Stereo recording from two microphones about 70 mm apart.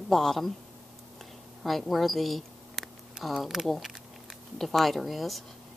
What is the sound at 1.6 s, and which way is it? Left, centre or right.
A woman's voice, centre.